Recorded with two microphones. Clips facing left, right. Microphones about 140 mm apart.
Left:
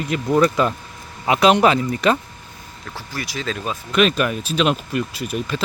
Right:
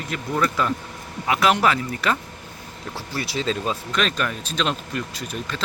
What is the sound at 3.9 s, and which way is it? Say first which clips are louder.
Speech: left 10 dB; 10° left (ahead or behind).